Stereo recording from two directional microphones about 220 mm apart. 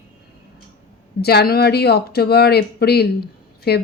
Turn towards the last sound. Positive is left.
turn(degrees=45)  # may be behind; listen again after turning